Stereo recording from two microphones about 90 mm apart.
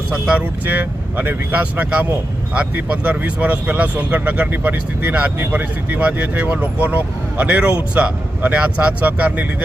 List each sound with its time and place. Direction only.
0.1 s speech: 15° right (ahead or behind)